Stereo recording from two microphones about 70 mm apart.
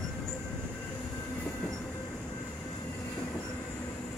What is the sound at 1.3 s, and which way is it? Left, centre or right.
Train, left.